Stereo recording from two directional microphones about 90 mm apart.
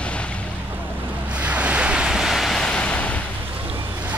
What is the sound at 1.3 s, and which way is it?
Waves, 15° right (ahead or behind).